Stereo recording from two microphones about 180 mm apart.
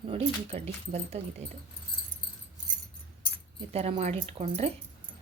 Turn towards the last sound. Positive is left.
turn(degrees=-35)  # may be behind; listen again after turning